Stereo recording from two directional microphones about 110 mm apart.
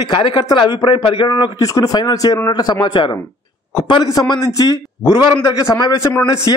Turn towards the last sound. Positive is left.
turn(degrees=30)  # may be behind; listen again after turning